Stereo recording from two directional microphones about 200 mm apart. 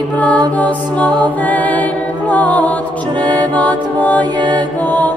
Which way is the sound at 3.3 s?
5° left (ahead or behind).